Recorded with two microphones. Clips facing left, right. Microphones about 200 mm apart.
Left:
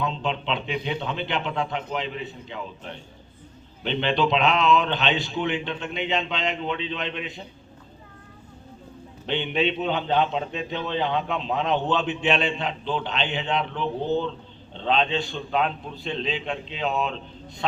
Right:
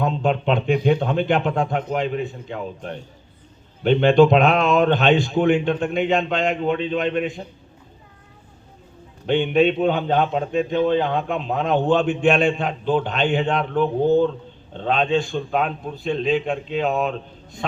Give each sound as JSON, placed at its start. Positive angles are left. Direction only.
{"t": 0.0, "sound": "a man's voice", "side_deg": -50}
{"t": 9.2, "sound": "a man's voice", "side_deg": -50}